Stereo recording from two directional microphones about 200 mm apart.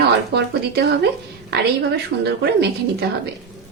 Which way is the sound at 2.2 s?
55° right (ahead or behind).